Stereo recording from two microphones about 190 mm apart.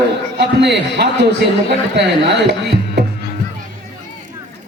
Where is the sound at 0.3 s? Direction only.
65° right (ahead or behind).